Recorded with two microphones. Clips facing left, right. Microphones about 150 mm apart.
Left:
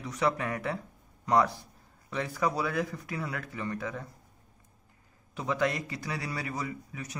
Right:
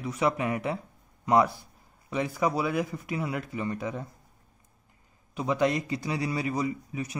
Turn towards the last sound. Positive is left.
turn(degrees=-15)  # may be behind; listen again after turning